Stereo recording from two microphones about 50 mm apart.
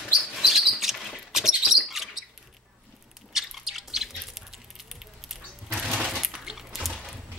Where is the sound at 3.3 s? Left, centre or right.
Centre.